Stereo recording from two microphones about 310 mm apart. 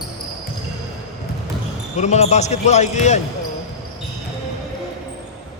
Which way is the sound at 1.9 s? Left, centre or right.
Left.